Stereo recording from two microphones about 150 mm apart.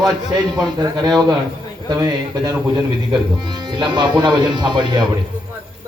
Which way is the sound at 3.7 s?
30° right (ahead or behind).